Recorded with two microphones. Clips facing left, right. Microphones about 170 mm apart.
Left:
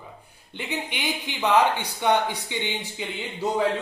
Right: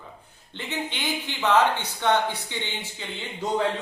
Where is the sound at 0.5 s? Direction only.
15° left (ahead or behind).